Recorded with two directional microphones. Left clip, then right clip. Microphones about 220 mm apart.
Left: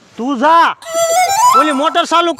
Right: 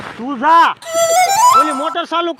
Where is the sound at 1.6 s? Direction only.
55° left (ahead or behind).